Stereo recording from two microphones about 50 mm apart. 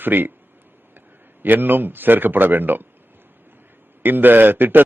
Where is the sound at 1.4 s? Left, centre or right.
Right.